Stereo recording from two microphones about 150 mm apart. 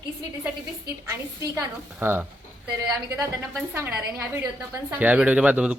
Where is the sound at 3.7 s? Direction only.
15° right (ahead or behind).